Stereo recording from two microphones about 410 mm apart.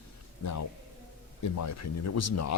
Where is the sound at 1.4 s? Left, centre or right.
Left.